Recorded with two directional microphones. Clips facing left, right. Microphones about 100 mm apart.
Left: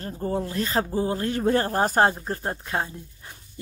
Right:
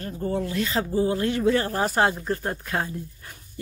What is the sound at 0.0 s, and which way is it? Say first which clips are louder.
Speech: even; 30° left (ahead or behind).